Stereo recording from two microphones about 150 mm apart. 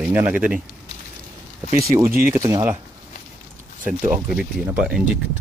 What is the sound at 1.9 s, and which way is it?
Speech, 15° right (ahead or behind).